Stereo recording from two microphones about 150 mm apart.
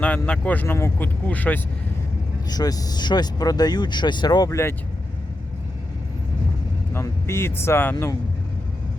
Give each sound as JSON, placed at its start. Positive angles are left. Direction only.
{"t": 0.0, "sound": "speech", "side_deg": 10}
{"t": 2.5, "sound": "speech", "side_deg": 25}
{"t": 6.9, "sound": "speech", "side_deg": 15}